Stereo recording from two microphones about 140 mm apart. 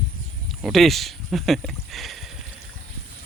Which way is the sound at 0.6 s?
Centre (ahead or behind).